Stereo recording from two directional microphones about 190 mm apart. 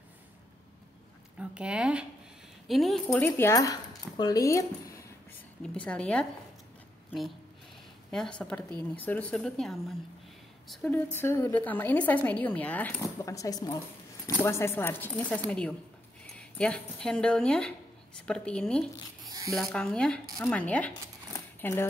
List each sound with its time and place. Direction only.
1.4 s speech: 5° right (ahead or behind); by 5.4 s 15° left (ahead or behind)
5.6 s speech: 5° left (ahead or behind)
21.3 s a sound: 10° left (ahead or behind)